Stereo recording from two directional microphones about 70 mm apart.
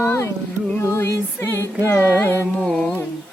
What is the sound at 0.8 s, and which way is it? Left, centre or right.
Music, left.